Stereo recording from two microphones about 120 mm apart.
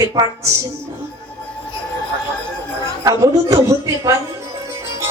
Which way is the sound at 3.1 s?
30° right (ahead or behind).